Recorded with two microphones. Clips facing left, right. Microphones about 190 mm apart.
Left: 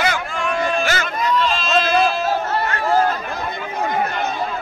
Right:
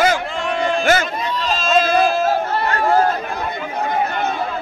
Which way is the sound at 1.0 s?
30° right (ahead or behind).